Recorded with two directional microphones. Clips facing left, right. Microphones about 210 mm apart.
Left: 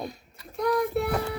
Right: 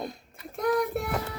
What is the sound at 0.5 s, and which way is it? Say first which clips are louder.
Child singing: left 1 dB; 50° right (ahead or behind).